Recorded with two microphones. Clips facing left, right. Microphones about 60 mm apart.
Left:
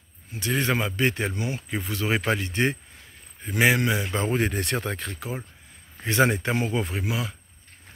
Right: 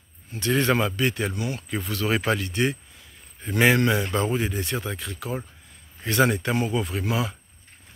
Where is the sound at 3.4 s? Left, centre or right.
Centre.